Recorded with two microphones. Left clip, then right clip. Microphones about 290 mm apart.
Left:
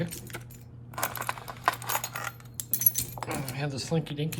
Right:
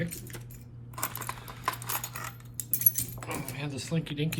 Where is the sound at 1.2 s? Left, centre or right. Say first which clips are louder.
Left 7 dB; centre.